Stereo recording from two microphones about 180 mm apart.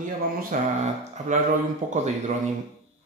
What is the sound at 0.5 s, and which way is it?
Speech, 50° right (ahead or behind).